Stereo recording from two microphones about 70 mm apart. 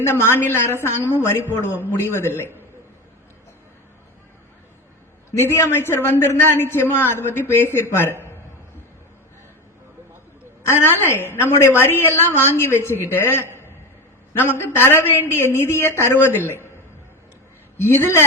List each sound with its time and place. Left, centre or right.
0.0 s a woman's voice: left
5.4 s a woman's voice: left
10.6 s a woman's voice: left
17.8 s a woman's voice: left